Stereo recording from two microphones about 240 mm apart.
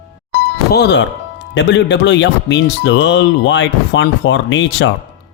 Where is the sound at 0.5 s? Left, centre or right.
Left.